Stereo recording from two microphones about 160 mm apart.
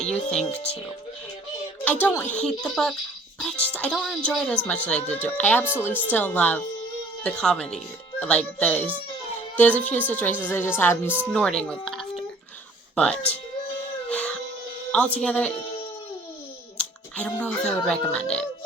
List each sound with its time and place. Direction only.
0.3 s speech: 40° left (ahead or behind)
1.8 s speech: 10° left (ahead or behind)
14.1 s music: 10° left (ahead or behind)
14.9 s speech: 10° left (ahead or behind)
17.2 s speech: 10° left (ahead or behind)